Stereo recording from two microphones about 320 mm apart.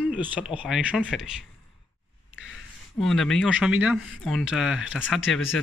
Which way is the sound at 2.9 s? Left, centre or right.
Centre.